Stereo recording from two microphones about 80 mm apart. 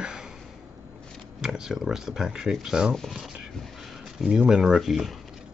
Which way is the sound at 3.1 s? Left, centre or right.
Centre.